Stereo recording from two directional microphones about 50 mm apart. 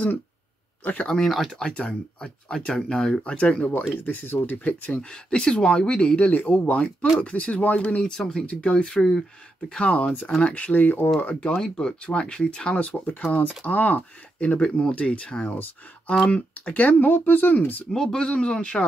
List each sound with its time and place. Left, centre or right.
1.0 s speech: centre
1.7 s speech: left
3.3 s speech: left
3.9 s speech: left
4.8 s speech: left
8.1 s speech: centre
9.7 s speech: left
11.4 s speech: centre; by 14.6 s left
14.6 s speech: centre; by 17.8 s left
17.9 s speech: centre